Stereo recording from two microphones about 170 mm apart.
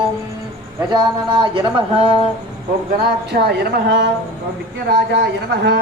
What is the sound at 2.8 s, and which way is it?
A man's voice, 70° right (ahead or behind).